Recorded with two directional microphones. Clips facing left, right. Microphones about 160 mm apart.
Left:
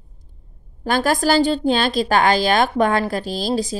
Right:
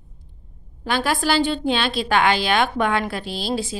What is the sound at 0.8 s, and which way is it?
A woman's voice, 45° left (ahead or behind).